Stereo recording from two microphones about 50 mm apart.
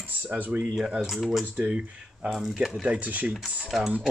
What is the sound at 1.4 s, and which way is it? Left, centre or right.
Speech, right.